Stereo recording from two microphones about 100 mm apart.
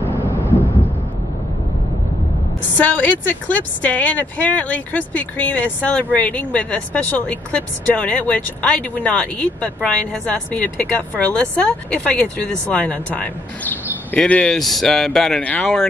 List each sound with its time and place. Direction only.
2.8 s speech: 15° left (ahead or behind)